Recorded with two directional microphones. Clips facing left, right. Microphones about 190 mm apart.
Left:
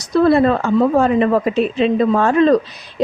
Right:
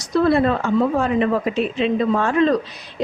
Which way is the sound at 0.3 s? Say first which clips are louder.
Left 4 dB; 40° left (ahead or behind).